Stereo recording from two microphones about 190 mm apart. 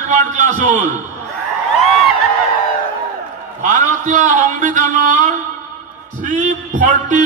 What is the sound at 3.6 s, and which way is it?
A man's voice, 40° right (ahead or behind).